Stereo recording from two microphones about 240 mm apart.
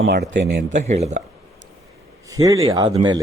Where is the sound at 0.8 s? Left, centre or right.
Right.